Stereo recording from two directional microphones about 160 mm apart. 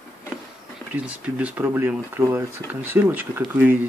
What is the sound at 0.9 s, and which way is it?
Speech, 10° right (ahead or behind).